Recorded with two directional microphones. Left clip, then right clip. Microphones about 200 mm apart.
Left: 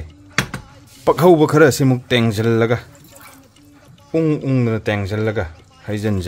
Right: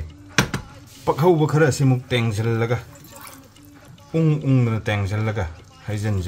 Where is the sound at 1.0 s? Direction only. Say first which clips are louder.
Left 6 dB; 50° left (ahead or behind).